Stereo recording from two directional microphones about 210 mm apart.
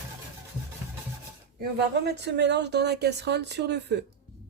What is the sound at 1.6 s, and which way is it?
Speech, 50° right (ahead or behind).